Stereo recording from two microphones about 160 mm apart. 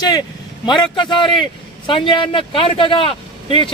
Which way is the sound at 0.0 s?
25° left (ahead or behind).